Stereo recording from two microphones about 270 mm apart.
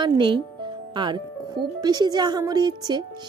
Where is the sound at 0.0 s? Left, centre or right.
Centre.